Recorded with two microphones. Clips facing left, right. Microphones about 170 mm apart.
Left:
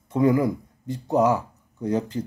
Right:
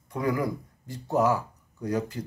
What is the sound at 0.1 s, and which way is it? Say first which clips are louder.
Speech: left 8 dB; 25° left (ahead or behind).